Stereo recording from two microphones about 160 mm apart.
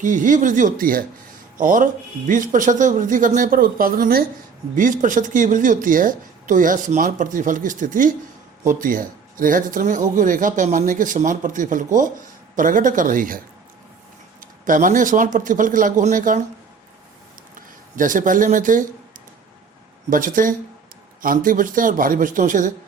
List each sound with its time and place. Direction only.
0.0 s speech: 55° right (ahead or behind)
14.6 s speech: 55° right (ahead or behind)
17.5 s speech: 55° right (ahead or behind)
20.1 s speech: 55° right (ahead or behind)